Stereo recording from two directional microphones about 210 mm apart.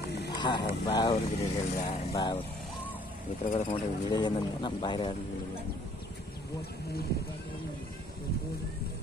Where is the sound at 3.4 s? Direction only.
40° left (ahead or behind).